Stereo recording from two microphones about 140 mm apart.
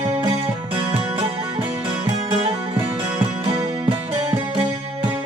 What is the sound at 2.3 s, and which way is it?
Music, 40° right (ahead or behind).